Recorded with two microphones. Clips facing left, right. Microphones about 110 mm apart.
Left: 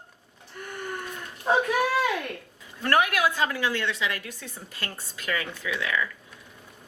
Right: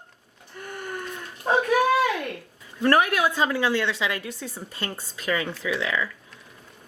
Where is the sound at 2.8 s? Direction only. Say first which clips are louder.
Right 3 dB; 35° right (ahead or behind).